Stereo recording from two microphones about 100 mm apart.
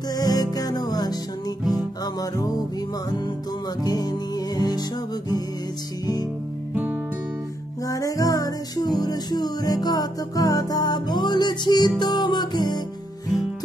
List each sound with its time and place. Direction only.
0.1 s music: 40° left (ahead or behind)
3.8 s music: 40° left (ahead or behind)
6.7 s music: 20° right (ahead or behind)
7.8 s music: 35° left (ahead or behind)